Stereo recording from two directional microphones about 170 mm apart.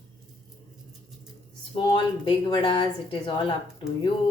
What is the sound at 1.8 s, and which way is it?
Speech, 30° left (ahead or behind).